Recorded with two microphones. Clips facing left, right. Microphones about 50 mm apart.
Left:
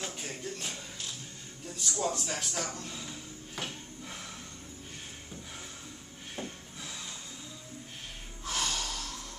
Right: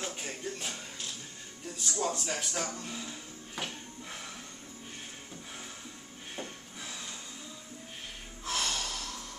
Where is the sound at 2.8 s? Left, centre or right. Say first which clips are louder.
Right 1 dB; centre.